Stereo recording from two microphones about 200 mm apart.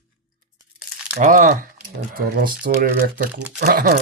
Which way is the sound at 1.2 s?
40° right (ahead or behind).